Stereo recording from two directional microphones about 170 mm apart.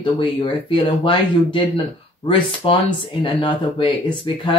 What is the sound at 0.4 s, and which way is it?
Speech, 30° left (ahead or behind).